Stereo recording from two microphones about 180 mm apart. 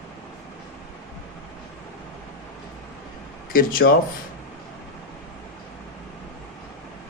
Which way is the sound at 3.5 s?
50° left (ahead or behind).